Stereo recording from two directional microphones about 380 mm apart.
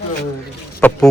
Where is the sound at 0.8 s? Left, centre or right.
Centre.